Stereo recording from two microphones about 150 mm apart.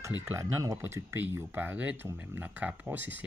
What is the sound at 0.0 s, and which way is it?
Speech, 20° right (ahead or behind).